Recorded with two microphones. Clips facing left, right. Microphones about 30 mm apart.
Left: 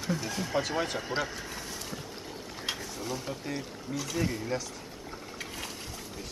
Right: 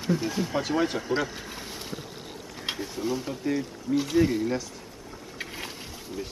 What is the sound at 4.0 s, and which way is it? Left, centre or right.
Speech, centre.